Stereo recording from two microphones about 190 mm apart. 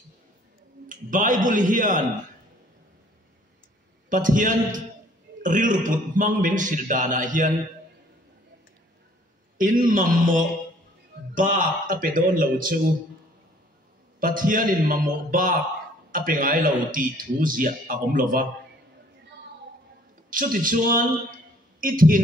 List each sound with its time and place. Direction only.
0.8 s a man's voice: 45° right (ahead or behind)
4.1 s a man's voice: 45° right (ahead or behind)
9.6 s a man's voice: 45° right (ahead or behind)
14.2 s a man's voice: 45° right (ahead or behind)
20.2 s a man's voice: 45° right (ahead or behind)